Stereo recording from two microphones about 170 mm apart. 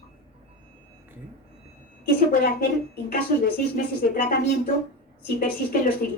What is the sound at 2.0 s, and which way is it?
A woman's voice, 65° left (ahead or behind).